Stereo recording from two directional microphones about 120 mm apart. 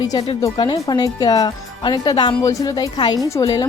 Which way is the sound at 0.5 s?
40° left (ahead or behind).